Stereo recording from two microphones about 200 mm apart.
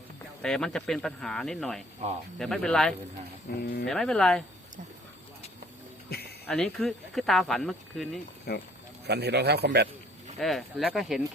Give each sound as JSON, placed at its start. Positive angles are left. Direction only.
{"t": 0.4, "sound": "speech", "side_deg": 5}
{"t": 3.6, "sound": "speech", "side_deg": 50}
{"t": 3.8, "sound": "speech", "side_deg": 0}
{"t": 6.1, "sound": "a sound", "side_deg": 50}
{"t": 6.4, "sound": "speech", "side_deg": 5}
{"t": 8.5, "sound": "speech", "side_deg": 50}
{"t": 9.0, "sound": "a man's voice", "side_deg": -55}
{"t": 10.3, "sound": "speech", "side_deg": 0}